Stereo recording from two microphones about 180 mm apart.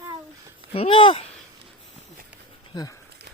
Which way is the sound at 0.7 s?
30° left (ahead or behind).